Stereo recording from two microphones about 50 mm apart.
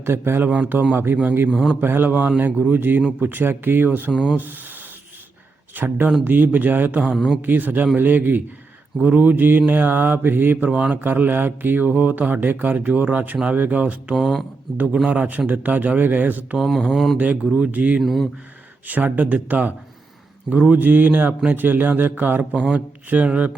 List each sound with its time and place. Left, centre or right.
0.0 s a man's voice: right
0.4 s speech: right
1.5 s a sound: centre
1.8 s a man's voice: right
4.1 s speech: centre
4.4 s speech: right
10.7 s speech: right
14.2 s a sound: centre
15.0 s speech: right
16.6 s a sound: centre
17.5 s speech: right
18.0 s a sound: centre
18.9 s speech: right
23.0 s speech: right